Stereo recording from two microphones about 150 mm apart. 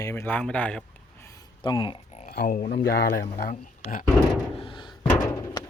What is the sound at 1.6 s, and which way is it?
Speech, 30° left (ahead or behind).